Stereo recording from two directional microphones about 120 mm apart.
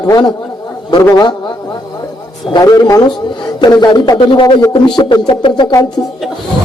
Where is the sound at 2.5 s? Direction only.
35° left (ahead or behind).